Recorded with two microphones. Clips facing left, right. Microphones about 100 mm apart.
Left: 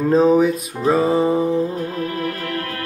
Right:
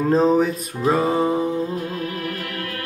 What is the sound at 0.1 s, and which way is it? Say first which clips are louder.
Music: left 3 dB; 5° left (ahead or behind).